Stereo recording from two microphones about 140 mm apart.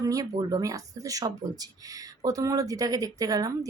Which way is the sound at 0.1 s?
25° right (ahead or behind).